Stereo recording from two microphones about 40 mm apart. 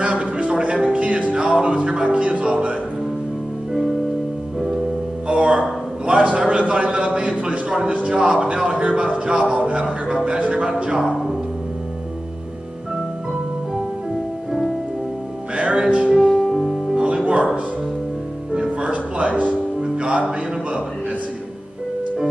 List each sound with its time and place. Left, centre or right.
0.0 s a sound: right
0.7 s music: right
2.0 s speech: right
5.3 s a sound: right
6.3 s speech: right
15.5 s music: right
16.2 s music: centre
16.9 s music: right
18.5 s music: right